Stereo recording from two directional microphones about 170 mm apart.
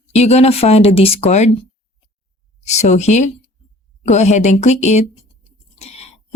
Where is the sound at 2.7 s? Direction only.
40° left (ahead or behind).